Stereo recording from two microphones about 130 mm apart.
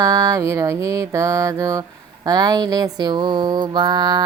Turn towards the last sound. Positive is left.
turn(degrees=-30)  # may be behind; listen again after turning